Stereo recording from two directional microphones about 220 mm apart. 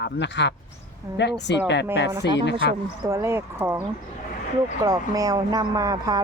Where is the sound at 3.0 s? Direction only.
15° right (ahead or behind).